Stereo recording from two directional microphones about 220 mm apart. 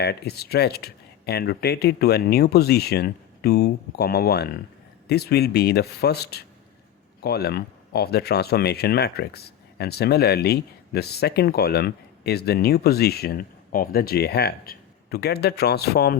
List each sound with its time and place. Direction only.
0.0 s speech: 45° left (ahead or behind)